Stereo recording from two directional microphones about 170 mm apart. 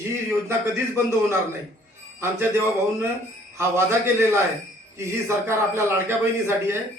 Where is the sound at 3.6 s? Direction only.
15° right (ahead or behind).